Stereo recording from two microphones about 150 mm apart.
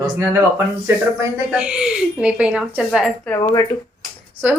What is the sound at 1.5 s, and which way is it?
A woman's voice, 5° right (ahead or behind).